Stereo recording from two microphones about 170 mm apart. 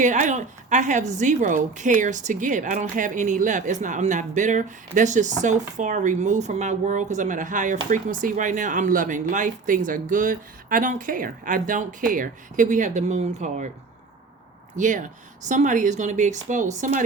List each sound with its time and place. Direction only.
0.0 s a woman's voice: 45° right (ahead or behind)
14.8 s a woman's voice: 50° right (ahead or behind)